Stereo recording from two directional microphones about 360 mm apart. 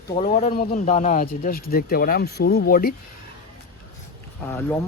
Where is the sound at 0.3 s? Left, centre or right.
Left.